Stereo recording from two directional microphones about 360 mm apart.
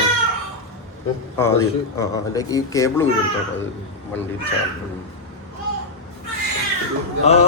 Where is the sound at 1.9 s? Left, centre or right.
Centre.